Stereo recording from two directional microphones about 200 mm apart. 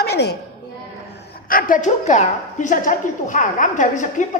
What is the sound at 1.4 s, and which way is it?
A woman's voice, 45° left (ahead or behind).